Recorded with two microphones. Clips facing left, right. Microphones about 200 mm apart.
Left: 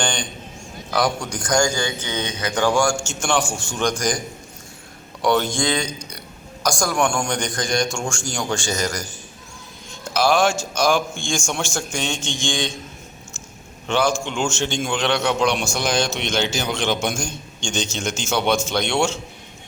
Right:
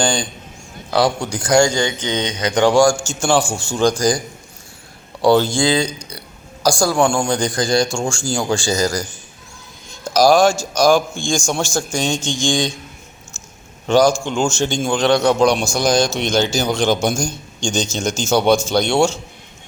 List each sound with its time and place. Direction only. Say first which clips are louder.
0.0 s a man's voice: right 6 dB; 35° right (ahead or behind)
1.8 s speech: right 5 dB; 15° right (ahead or behind)
2.7 s a man's voice: right 6 dB; 35° right (ahead or behind)
5.2 s a man's voice: right 6 dB; 30° right (ahead or behind)
10.1 s a man's voice: right 6 dB; 40° right (ahead or behind)
13.8 s a man's voice: right 7 dB; 40° right (ahead or behind)